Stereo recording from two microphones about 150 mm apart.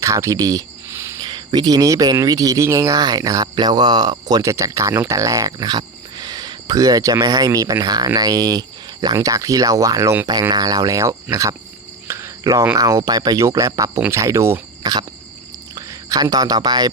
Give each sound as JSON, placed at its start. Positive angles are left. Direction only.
{"t": 0.0, "sound": "speech", "side_deg": -20}